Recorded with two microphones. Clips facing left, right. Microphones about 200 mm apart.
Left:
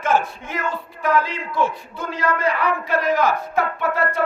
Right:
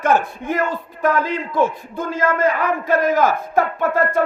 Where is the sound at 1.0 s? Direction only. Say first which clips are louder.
Right 2 dB; 50° right (ahead or behind).